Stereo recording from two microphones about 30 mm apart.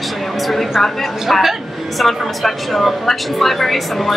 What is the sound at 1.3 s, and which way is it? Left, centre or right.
Speech, centre.